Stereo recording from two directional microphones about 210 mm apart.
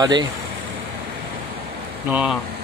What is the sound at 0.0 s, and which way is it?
Speech, 20° right (ahead or behind).